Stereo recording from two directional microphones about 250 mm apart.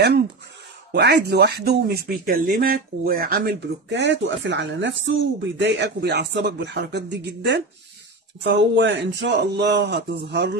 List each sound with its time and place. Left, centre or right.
0.9 s speech: right